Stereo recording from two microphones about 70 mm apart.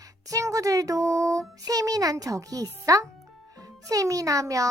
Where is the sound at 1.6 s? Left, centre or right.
Right.